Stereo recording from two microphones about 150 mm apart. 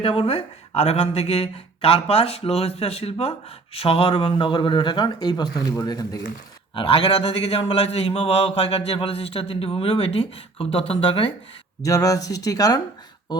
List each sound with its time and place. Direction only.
0.0 s a man's voice: 35° left (ahead or behind)
6.7 s a man's voice: 35° left (ahead or behind)
11.8 s speech: 20° left (ahead or behind)